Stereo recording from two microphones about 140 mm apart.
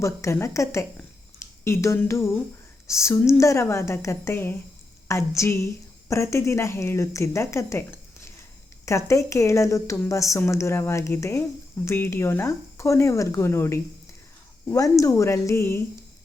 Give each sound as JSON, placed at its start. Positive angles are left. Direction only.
{"t": 0.0, "sound": "a woman's voice", "side_deg": 20}